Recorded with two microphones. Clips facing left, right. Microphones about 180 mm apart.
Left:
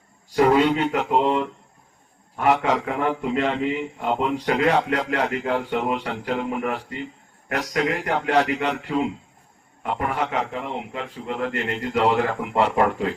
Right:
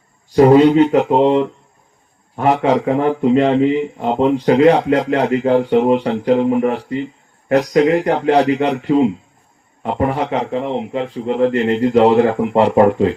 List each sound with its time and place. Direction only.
0.3 s a man's voice: 35° right (ahead or behind)